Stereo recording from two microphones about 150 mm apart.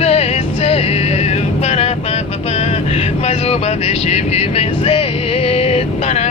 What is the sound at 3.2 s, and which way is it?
Speech, 45° left (ahead or behind).